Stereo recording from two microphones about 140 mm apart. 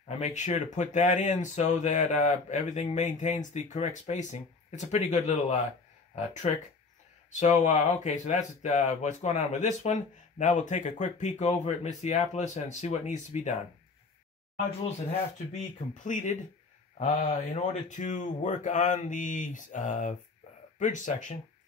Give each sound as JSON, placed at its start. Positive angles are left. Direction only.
{"t": 0.2, "sound": "speech", "side_deg": 55}
{"t": 7.3, "sound": "speech", "side_deg": 55}
{"t": 15.0, "sound": "speech", "side_deg": 65}